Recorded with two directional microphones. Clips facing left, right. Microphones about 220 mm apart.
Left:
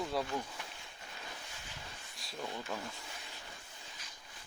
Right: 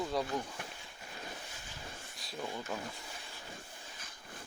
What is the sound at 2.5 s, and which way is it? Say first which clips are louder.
Speech: right 1 dB; 5° right (ahead or behind).